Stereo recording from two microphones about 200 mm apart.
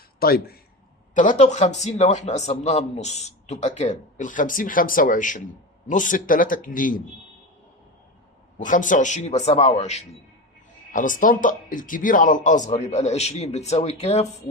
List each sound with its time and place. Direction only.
0.2 s speech: 50° left (ahead or behind)
1.1 s a man's voice: 40° left (ahead or behind)
8.5 s a man's voice: 40° left (ahead or behind)